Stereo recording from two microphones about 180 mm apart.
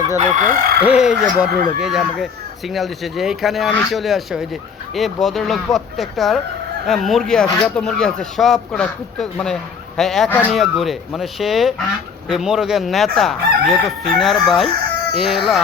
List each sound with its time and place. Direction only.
0.2 s fowl: 45° right (ahead or behind)
0.8 s speech: 5° right (ahead or behind)